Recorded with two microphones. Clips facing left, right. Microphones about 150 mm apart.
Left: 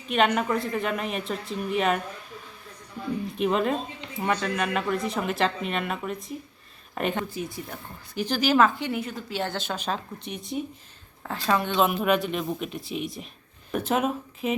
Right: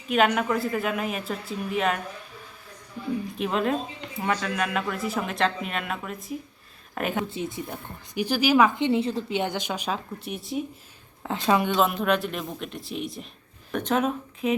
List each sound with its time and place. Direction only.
0.1 s speech: centre (ahead or behind)
3.3 s speech: centre (ahead or behind)
7.3 s a woman's voice: 25° right (ahead or behind)
7.7 s speech: 10° right (ahead or behind)
8.7 s a woman's voice: 25° right (ahead or behind)
9.4 s speech: 15° right (ahead or behind)
11.2 s speech: 20° right (ahead or behind)
11.7 s speech: centre (ahead or behind)